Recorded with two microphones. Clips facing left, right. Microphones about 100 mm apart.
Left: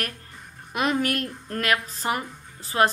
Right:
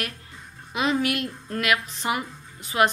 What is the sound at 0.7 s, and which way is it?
Speech, 55° left (ahead or behind).